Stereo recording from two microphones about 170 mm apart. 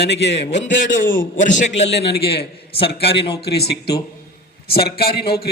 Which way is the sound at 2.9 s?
85° left.